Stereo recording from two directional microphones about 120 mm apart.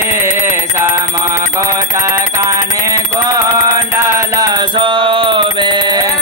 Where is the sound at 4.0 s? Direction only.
25° right (ahead or behind).